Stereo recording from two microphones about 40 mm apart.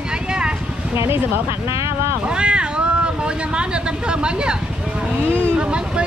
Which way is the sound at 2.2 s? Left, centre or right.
Right.